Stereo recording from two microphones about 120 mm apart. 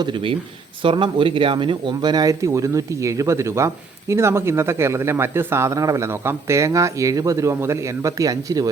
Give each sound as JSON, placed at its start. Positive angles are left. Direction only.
{"t": 0.0, "sound": "speech", "side_deg": -45}